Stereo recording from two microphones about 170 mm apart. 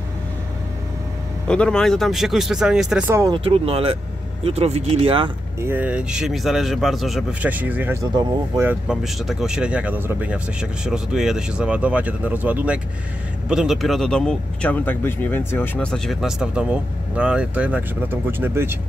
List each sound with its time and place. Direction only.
1.5 s speech: 5° left (ahead or behind); by 3.3 s 15° right (ahead or behind)
3.3 s speech: 35° right (ahead or behind)
5.6 s speech: 10° right (ahead or behind)
8.8 s speech: centre (ahead or behind)